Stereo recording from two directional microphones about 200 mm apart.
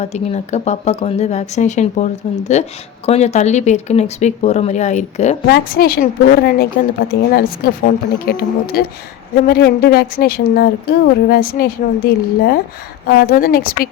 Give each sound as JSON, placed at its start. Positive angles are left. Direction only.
{"t": 0.0, "sound": "speech", "side_deg": 35}
{"t": 5.5, "sound": "a woman's voice", "side_deg": 50}